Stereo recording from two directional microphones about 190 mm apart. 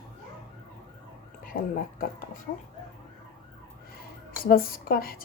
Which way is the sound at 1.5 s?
50° left (ahead or behind).